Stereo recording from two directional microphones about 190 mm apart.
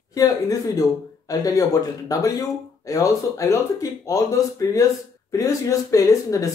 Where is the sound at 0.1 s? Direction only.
20° left (ahead or behind).